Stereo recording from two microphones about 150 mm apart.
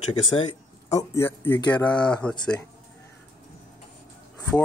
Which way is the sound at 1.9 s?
5° left (ahead or behind).